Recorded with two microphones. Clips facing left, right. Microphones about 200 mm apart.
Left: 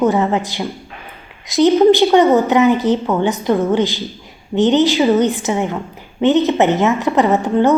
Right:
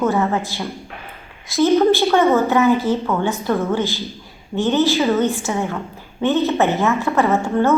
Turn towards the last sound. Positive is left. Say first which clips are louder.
# left 3 dB
turn(degrees=15)  # may be behind; listen again after turning